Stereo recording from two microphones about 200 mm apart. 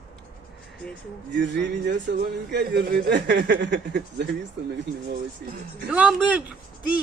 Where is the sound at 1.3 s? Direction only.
65° right (ahead or behind).